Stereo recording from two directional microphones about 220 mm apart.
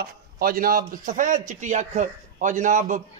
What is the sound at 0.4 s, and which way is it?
A man's voice, 40° right (ahead or behind).